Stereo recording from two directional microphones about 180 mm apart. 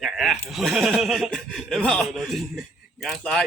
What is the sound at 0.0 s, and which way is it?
A man's voice, centre (ahead or behind).